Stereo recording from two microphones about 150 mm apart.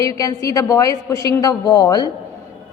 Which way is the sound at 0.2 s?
25° left (ahead or behind).